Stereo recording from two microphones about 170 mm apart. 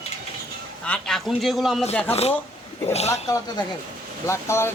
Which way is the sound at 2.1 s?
35° left (ahead or behind).